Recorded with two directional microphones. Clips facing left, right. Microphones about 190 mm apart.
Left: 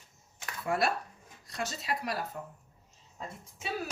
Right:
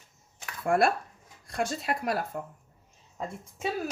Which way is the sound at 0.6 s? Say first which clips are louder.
Right 6 dB; 50° right (ahead or behind).